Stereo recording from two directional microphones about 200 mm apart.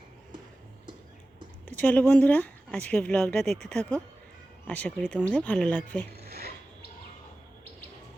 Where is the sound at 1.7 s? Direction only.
5° left (ahead or behind).